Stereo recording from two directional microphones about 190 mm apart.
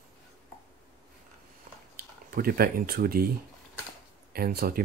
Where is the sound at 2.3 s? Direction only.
50° right (ahead or behind).